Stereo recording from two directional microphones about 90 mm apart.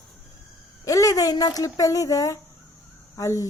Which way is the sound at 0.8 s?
40° left (ahead or behind).